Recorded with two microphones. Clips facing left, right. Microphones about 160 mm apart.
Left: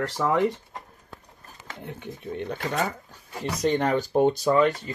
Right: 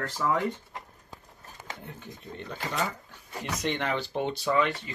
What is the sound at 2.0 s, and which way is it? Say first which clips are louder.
Speech: left 8 dB; 60° left (ahead or behind).